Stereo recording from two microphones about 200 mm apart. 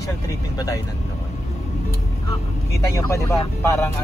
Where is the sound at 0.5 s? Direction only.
15° left (ahead or behind).